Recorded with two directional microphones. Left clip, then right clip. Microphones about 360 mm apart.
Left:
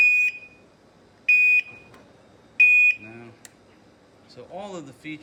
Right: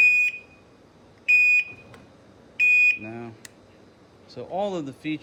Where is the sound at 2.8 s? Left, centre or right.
Centre.